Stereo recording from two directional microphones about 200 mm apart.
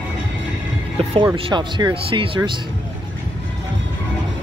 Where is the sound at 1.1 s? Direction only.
25° right (ahead or behind).